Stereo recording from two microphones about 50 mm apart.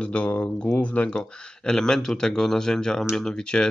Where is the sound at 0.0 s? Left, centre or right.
Left.